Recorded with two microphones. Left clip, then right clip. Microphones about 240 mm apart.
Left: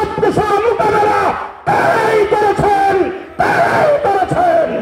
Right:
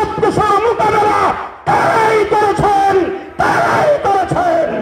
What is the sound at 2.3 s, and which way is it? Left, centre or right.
Music, right.